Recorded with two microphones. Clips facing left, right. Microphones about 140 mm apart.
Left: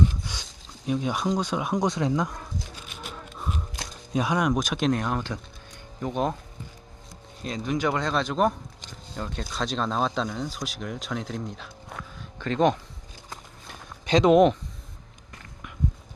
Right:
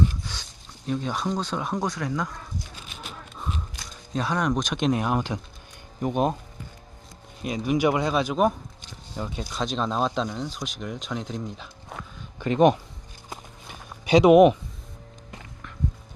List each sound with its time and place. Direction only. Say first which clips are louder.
0.3 s a sound: left 1 dB; 15° left (ahead or behind)
0.9 s speech: left 2 dB; 10° left (ahead or behind)
4.1 s speech: left 1 dB; 10° left (ahead or behind)
4.9 s speech: right 3 dB; 10° right (ahead or behind)
7.4 s speech: right 4 dB; 10° right (ahead or behind)
13.7 s a sound: right 3 dB; 10° right (ahead or behind)